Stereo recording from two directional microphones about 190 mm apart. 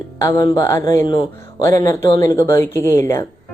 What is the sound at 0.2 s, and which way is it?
Speech, 15° left (ahead or behind).